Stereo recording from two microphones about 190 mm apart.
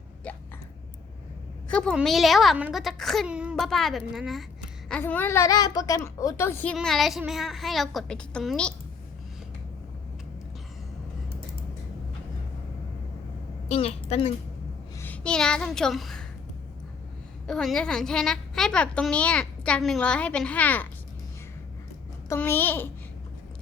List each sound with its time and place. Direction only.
0.2 s hiccup: 5° left (ahead or behind)
1.7 s a woman's voice: 5° left (ahead or behind)
6.7 s a woman's voice: centre (ahead or behind)
13.7 s a woman's voice: 35° left (ahead or behind)
14.9 s a child's voice: 10° left (ahead or behind)
17.4 s a woman's voice: centre (ahead or behind)
22.3 s a woman's voice: 10° left (ahead or behind)